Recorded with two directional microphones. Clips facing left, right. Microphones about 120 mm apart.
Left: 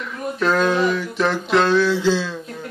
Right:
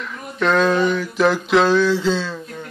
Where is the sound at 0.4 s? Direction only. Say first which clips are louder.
Right 2 dB; 5° left (ahead or behind).